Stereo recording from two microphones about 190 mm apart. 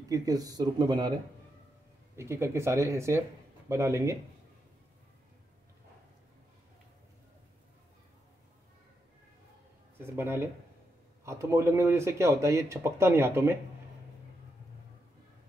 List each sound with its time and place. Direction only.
0.1 s speech: 20° right (ahead or behind)
2.1 s speech: 15° right (ahead or behind)
9.9 s speech: 10° right (ahead or behind)